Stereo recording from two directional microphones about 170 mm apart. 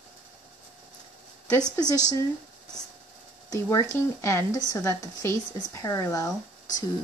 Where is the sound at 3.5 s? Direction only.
20° left (ahead or behind).